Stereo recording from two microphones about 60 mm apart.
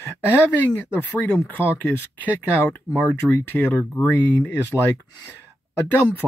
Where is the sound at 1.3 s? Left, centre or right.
Left.